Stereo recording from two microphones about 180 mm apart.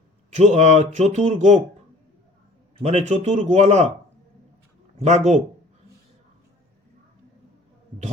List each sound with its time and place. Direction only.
0.3 s speech: 40° right (ahead or behind)
2.7 s speech: 35° right (ahead or behind)
5.0 s speech: 40° right (ahead or behind)